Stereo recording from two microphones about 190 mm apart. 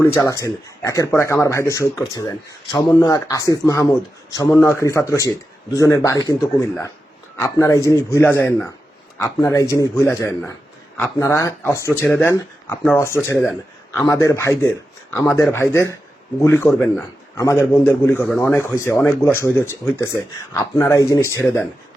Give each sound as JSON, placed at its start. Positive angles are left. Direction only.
{"t": 0.0, "sound": "a man's voice", "side_deg": 15}